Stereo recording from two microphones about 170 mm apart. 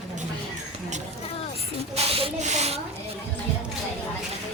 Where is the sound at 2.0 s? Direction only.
35° right (ahead or behind).